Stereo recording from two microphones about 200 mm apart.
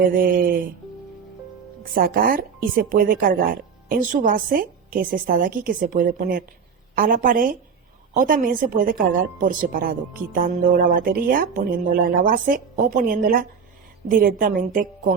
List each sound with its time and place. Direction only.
0.1 s a woman's voice: 45° right (ahead or behind)
1.8 s a woman's voice: 45° right (ahead or behind)